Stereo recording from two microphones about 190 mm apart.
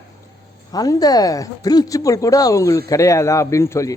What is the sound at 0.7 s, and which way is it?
A man's voice, 20° left (ahead or behind).